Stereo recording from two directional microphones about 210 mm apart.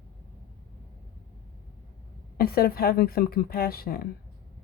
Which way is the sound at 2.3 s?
45° left (ahead or behind).